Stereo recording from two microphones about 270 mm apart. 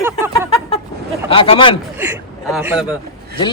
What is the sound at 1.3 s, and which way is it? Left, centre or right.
Speech, centre.